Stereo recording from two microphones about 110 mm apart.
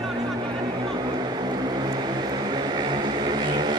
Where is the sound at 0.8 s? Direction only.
45° right (ahead or behind).